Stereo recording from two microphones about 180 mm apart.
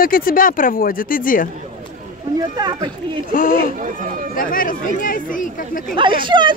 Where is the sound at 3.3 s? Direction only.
50° left (ahead or behind).